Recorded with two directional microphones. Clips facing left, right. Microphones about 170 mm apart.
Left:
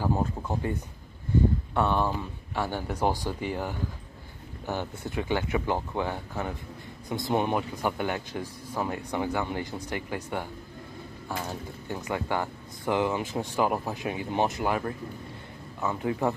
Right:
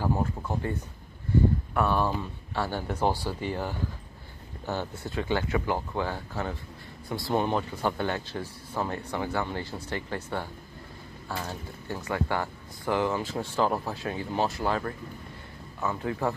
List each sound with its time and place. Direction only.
0.0 s speech: 15° left (ahead or behind)